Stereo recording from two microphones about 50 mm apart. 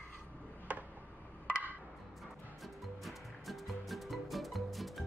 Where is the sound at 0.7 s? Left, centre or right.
Right.